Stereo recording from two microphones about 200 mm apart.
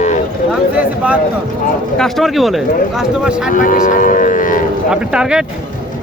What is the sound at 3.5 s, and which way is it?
Livestock, 40° left (ahead or behind).